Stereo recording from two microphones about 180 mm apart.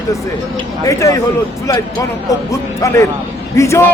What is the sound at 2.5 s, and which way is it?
A man's voice, 15° left (ahead or behind).